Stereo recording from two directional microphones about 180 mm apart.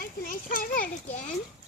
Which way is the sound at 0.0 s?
50° left (ahead or behind).